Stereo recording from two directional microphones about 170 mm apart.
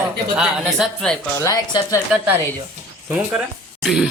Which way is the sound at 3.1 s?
10° right (ahead or behind).